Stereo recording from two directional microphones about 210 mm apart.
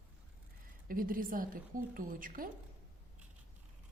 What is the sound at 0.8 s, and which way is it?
A woman's voice, 40° right (ahead or behind).